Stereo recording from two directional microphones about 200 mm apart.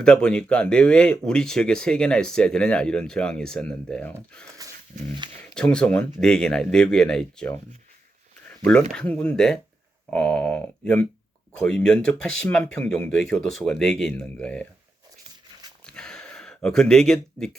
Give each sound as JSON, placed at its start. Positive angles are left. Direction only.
{"t": 0.0, "sound": "speech", "side_deg": 5}
{"t": 5.2, "sound": "speech", "side_deg": -25}
{"t": 5.5, "sound": "speech", "side_deg": 5}
{"t": 15.9, "sound": "a sound", "side_deg": 5}